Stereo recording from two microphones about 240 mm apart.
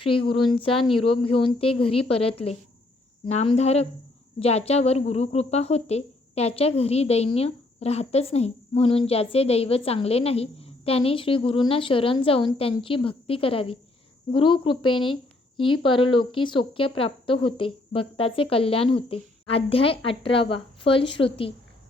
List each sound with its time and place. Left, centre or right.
0.0 s speech: left